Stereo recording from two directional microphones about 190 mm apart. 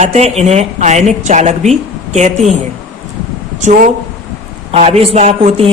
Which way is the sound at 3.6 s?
40° right (ahead or behind).